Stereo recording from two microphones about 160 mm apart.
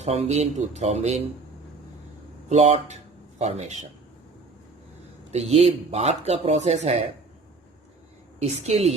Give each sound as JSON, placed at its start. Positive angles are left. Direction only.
{"t": 0.0, "sound": "speech", "side_deg": -45}
{"t": 2.5, "sound": "speech", "side_deg": -45}
{"t": 5.3, "sound": "speech", "side_deg": -40}
{"t": 8.4, "sound": "a woman's voice", "side_deg": -40}